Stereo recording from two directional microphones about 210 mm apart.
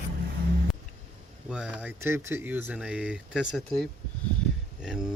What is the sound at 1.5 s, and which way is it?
Speech, 5° right (ahead or behind).